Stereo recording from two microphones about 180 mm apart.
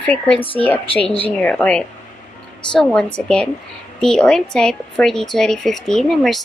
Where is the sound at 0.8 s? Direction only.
30° left (ahead or behind).